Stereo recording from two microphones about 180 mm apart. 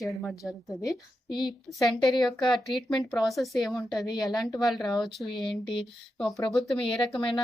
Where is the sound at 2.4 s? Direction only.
Centre (ahead or behind).